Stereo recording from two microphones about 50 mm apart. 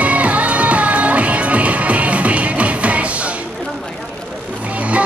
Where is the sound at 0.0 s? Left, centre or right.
Right.